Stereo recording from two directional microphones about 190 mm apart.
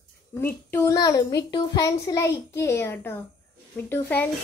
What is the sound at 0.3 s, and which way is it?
A child's voice, 10° left (ahead or behind).